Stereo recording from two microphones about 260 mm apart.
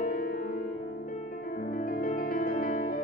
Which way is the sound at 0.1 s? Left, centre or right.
Left.